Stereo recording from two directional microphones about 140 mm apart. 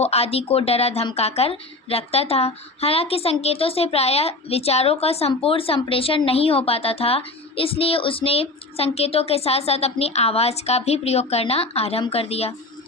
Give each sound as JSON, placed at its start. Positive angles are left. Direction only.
{"t": 0.0, "sound": "a woman's voice", "side_deg": 45}